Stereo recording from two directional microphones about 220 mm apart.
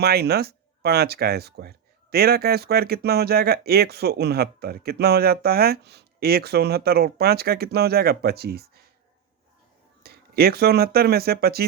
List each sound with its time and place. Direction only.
0.0 s speech: 45° right (ahead or behind)
10.0 s speech: 45° right (ahead or behind)